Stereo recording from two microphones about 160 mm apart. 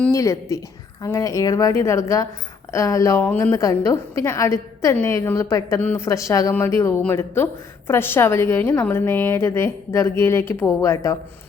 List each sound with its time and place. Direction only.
0.1 s a woman's voice: 20° left (ahead or behind)